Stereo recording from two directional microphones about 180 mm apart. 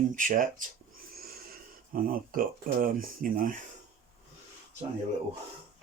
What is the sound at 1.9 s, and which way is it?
Speech, 50° right (ahead or behind).